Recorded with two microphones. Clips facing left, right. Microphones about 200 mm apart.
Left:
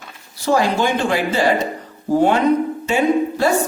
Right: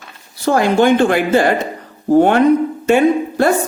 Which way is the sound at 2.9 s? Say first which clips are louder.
Right 5 dB; 55° right (ahead or behind).